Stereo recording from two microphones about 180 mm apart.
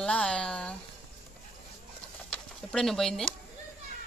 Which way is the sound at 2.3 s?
5° left (ahead or behind).